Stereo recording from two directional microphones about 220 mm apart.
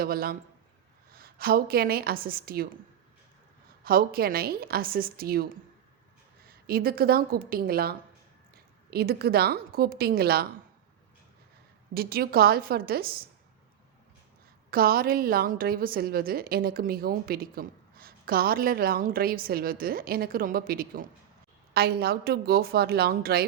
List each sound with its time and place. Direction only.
0.0 s a woman's voice: 45° right (ahead or behind)
3.8 s a woman's voice: 45° right (ahead or behind)
11.9 s a woman's voice: 45° right (ahead or behind)
14.7 s a woman's voice: 45° right (ahead or behind)